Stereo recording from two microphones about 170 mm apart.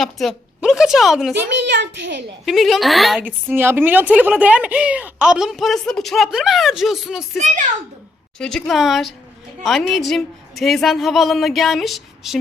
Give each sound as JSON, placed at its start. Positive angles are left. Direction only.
{"t": 0.0, "sound": "a woman's voice", "side_deg": 0}
{"t": 1.4, "sound": "a child's voice", "side_deg": -90}
{"t": 2.5, "sound": "a woman's voice", "side_deg": 0}
{"t": 8.4, "sound": "a woman's voice", "side_deg": 5}